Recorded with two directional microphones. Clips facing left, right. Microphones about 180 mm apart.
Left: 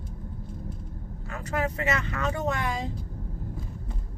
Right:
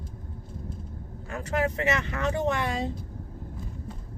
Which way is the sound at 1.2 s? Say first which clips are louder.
Right 2 dB; 25° right (ahead or behind).